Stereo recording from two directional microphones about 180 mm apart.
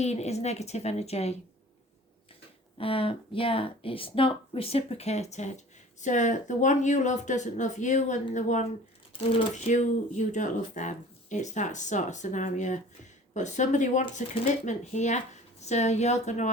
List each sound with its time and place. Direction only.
0.0 s a woman's voice: 35° left (ahead or behind)
2.7 s a woman's voice: 30° left (ahead or behind)